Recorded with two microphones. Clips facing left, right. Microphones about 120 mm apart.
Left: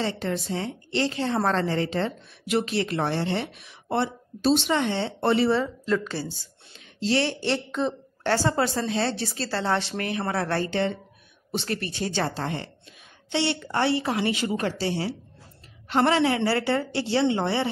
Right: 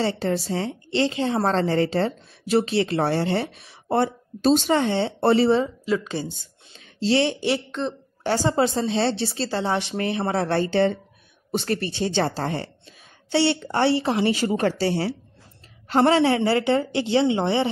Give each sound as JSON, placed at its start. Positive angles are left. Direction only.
{"t": 0.0, "sound": "a woman's voice", "side_deg": -35}
{"t": 1.5, "sound": "speech", "side_deg": -35}
{"t": 5.9, "sound": "a woman's voice", "side_deg": -15}
{"t": 9.5, "sound": "a woman's voice", "side_deg": -15}
{"t": 11.5, "sound": "speech", "side_deg": -45}
{"t": 11.8, "sound": "a woman's voice", "side_deg": -25}
{"t": 16.5, "sound": "a woman's voice", "side_deg": -20}